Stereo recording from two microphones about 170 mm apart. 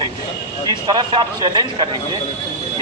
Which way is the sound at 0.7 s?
25° right (ahead or behind).